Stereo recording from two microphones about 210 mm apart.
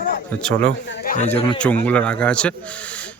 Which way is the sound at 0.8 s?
55° left (ahead or behind).